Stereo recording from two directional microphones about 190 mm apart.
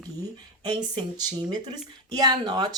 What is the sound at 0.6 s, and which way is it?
Speech, 20° right (ahead or behind).